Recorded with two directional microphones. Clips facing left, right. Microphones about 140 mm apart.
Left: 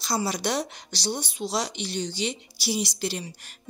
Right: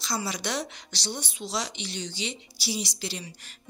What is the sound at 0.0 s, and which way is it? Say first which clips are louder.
Speech: left 4 dB; 40° left (ahead or behind).